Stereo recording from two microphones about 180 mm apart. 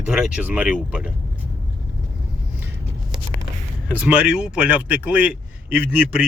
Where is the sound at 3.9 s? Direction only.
5° right (ahead or behind).